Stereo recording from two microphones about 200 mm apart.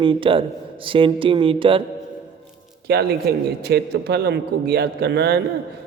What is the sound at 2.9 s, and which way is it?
A man's voice, 50° right (ahead or behind).